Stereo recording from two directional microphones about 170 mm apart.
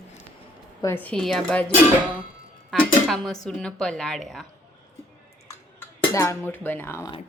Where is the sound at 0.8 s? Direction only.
15° left (ahead or behind).